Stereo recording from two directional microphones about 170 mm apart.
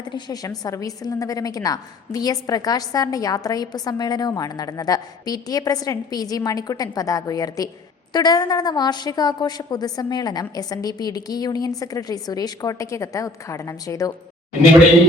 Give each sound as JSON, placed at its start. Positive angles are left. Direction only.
{"t": 0.1, "sound": "a woman's voice", "side_deg": 20}